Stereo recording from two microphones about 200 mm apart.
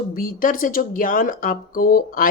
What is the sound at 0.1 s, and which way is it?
Speech, 45° left (ahead or behind).